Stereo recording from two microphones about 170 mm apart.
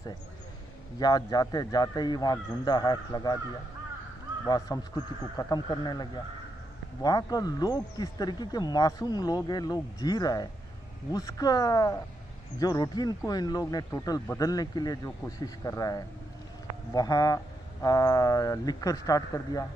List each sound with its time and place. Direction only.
0.9 s speech: 25° left (ahead or behind)
4.5 s speech: 20° left (ahead or behind)